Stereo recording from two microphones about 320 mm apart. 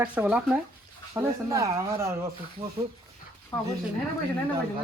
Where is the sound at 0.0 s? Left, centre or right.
Centre.